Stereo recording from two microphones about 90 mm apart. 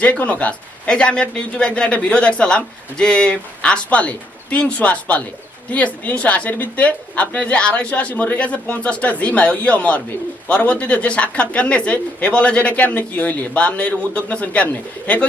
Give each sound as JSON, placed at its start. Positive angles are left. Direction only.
{"t": 0.0, "sound": "speech", "side_deg": 15}